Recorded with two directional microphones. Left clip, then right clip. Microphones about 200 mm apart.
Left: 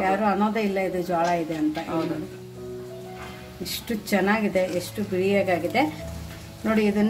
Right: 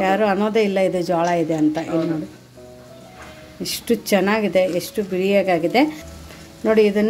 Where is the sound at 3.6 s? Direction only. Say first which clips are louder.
Right 9 dB; 40° right (ahead or behind).